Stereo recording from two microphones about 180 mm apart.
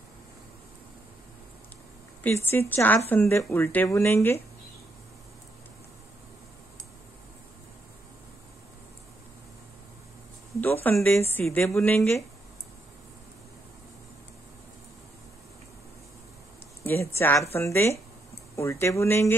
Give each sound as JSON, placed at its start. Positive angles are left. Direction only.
{"t": 2.2, "sound": "speech", "side_deg": 10}
{"t": 10.6, "sound": "speech", "side_deg": 10}
{"t": 16.8, "sound": "speech", "side_deg": 15}